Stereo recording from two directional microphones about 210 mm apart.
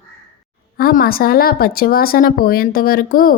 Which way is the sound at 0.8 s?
45° left (ahead or behind).